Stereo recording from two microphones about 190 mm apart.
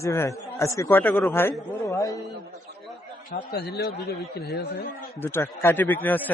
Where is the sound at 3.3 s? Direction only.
55° left (ahead or behind).